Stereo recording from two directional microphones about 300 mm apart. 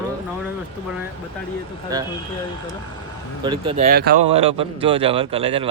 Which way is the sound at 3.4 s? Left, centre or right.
Centre.